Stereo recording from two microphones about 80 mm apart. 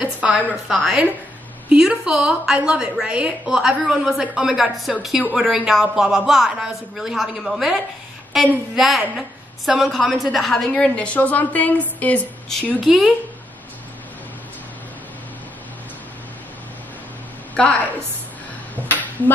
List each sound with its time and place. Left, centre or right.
0.0 s a woman's voice: centre
12.8 s speech: centre
18.9 s a sound: left